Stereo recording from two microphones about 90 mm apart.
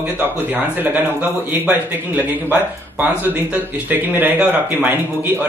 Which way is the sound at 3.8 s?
20° right (ahead or behind).